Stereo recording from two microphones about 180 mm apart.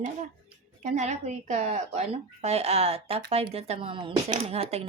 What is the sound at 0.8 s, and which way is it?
Speech, 40° right (ahead or behind).